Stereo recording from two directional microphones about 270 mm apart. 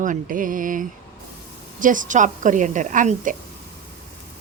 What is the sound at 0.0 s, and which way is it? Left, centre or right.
A woman's voice, right.